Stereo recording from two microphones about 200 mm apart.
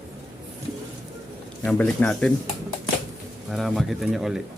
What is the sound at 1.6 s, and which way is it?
Speech, 5° left (ahead or behind).